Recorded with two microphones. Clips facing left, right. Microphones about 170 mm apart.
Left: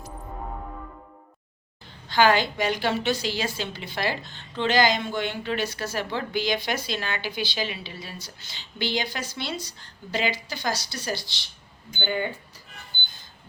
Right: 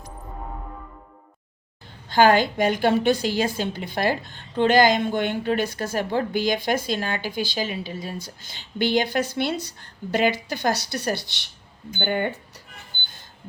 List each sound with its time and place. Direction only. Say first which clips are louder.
2.0 s a woman's voice: right 3 dB; 50° right (ahead or behind)